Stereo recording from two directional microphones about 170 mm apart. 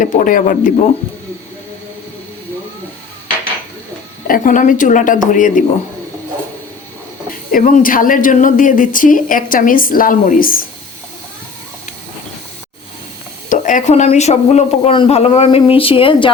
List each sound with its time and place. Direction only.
0.0 s speech: 50° left (ahead or behind)
4.3 s speech: 50° left (ahead or behind)
7.5 s speech: 50° left (ahead or behind)
13.5 s speech: 50° left (ahead or behind); by 16.3 s 30° left (ahead or behind)